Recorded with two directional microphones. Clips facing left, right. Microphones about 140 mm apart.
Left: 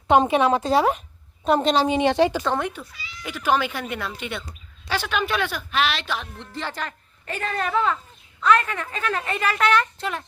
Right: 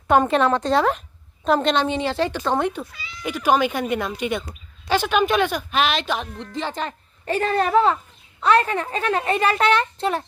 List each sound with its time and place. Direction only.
0.3 s speech: 5° left (ahead or behind)
2.0 s speech: 15° left (ahead or behind)
2.6 s a woman's voice: 30° right (ahead or behind)
3.2 s a woman's voice: 15° right (ahead or behind)
7.3 s a woman's voice: 35° right (ahead or behind)